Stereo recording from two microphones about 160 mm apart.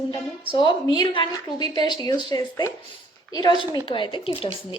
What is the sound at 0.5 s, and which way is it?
A woman's voice, 30° left (ahead or behind).